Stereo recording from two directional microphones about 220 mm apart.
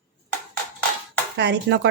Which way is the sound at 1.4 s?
55° right (ahead or behind).